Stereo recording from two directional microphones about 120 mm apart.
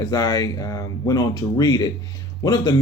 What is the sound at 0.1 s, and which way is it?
Speech, 30° left (ahead or behind).